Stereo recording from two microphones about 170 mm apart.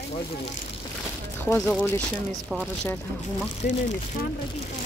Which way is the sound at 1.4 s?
10° left (ahead or behind).